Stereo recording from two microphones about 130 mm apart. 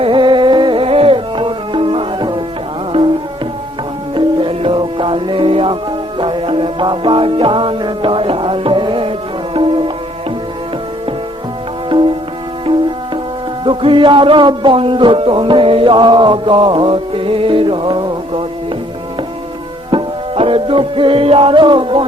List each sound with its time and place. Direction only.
0.0 s music: 40° right (ahead or behind)
4.1 s music: 40° right (ahead or behind)
11.9 s music: 40° right (ahead or behind)
13.7 s a man's voice: 40° right (ahead or behind)
19.9 s music: 40° right (ahead or behind)